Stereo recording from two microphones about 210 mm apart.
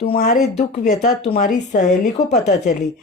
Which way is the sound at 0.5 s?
35° left (ahead or behind).